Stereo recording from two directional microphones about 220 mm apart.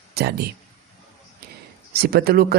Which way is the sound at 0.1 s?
45° right (ahead or behind).